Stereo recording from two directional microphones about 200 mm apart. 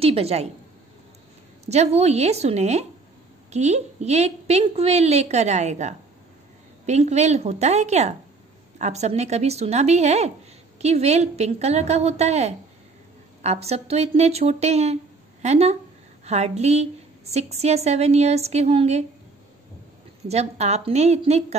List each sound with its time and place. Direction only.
0.0 s a woman's voice: 30° right (ahead or behind)
1.7 s a woman's voice: 30° right (ahead or behind)
20.2 s a woman's voice: 30° right (ahead or behind)